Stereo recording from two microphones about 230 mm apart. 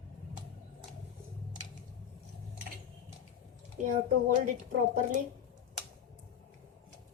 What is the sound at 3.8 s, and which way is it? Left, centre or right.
A woman's voice, right.